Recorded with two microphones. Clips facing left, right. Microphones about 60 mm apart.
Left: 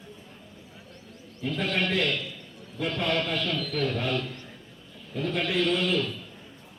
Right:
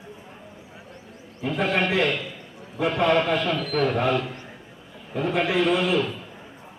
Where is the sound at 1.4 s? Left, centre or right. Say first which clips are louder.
Right 5 dB; right.